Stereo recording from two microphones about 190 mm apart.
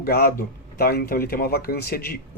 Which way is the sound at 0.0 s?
50° left (ahead or behind).